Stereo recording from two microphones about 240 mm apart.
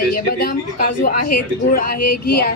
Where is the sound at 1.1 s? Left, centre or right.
Left.